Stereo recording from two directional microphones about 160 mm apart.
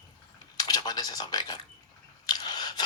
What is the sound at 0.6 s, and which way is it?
Speech, 25° left (ahead or behind).